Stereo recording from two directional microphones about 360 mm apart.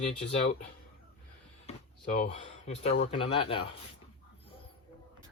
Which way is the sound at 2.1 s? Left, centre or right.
Centre.